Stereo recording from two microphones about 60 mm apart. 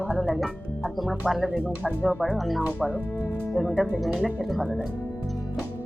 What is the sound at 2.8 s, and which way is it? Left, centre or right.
Speech, right.